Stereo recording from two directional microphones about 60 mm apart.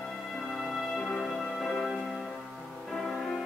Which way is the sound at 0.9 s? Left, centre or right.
Centre.